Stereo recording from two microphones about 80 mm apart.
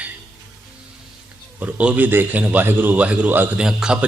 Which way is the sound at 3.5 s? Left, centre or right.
Centre.